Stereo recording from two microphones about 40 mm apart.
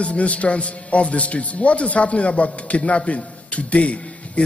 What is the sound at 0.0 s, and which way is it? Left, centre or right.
A man's voice, left.